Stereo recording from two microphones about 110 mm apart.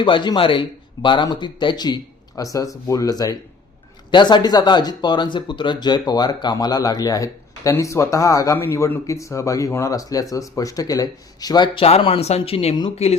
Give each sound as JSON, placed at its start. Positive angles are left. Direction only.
{"t": 0.0, "sound": "speech", "side_deg": 45}
{"t": 11.9, "sound": "speech", "side_deg": 55}